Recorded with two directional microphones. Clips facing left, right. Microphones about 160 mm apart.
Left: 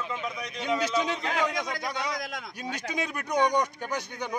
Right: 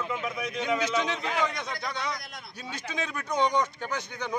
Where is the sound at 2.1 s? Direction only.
90° left.